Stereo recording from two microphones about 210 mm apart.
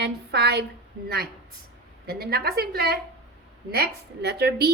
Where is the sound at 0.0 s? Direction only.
50° right (ahead or behind).